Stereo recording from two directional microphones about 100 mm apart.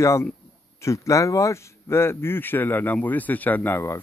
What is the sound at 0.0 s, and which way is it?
Speech, 30° left (ahead or behind).